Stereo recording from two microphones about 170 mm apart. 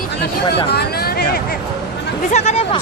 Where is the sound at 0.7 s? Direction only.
70° left (ahead or behind).